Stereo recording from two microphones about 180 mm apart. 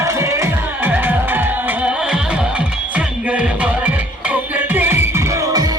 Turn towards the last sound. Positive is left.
turn(degrees=-20)  # may be behind; listen again after turning